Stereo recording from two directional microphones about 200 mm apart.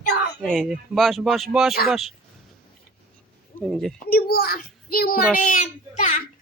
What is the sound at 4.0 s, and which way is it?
A child's voice, 50° left (ahead or behind).